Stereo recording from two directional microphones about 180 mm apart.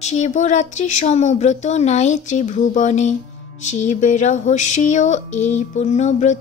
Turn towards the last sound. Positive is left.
turn(degrees=40)  # may be behind; listen again after turning